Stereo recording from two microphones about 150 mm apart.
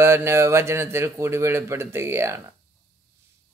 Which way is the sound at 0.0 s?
15° right (ahead or behind).